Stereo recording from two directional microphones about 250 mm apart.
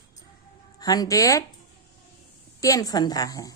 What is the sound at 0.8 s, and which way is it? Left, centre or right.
Speech, centre.